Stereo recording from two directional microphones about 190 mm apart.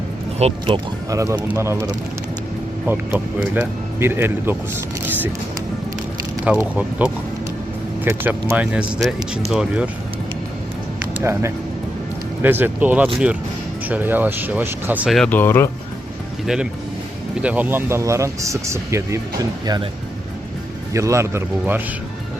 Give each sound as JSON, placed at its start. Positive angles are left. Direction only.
{"t": 0.3, "sound": "speech", "side_deg": -30}
{"t": 1.1, "sound": "speech", "side_deg": -15}
{"t": 6.4, "sound": "speech", "side_deg": -5}
{"t": 11.2, "sound": "speech", "side_deg": -15}
{"t": 17.4, "sound": "speech", "side_deg": -10}
{"t": 20.9, "sound": "speech", "side_deg": -15}